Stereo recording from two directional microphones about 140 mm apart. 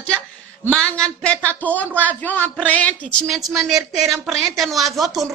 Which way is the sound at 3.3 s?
Centre (ahead or behind).